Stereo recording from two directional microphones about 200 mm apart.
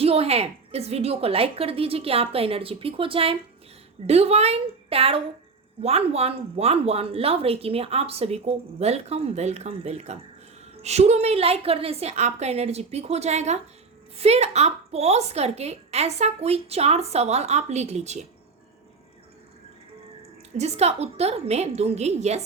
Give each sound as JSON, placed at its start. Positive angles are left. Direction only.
{"t": 0.0, "sound": "a woman's voice", "side_deg": -30}
{"t": 20.6, "sound": "speech", "side_deg": -30}